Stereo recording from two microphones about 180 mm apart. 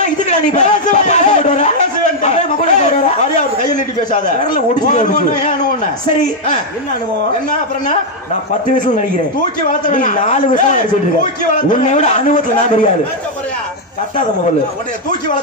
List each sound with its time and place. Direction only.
0.3 s a sound: 40° left (ahead or behind)
2.2 s chatter: 40° left (ahead or behind)
4.1 s a man's voice: 40° left (ahead or behind)
9.7 s a man's voice: 45° left (ahead or behind)